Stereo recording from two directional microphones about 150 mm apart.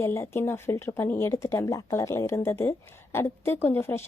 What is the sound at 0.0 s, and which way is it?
Speech, 20° left (ahead or behind).